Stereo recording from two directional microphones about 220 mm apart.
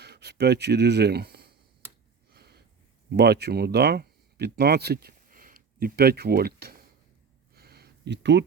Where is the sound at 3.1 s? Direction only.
50° right (ahead or behind).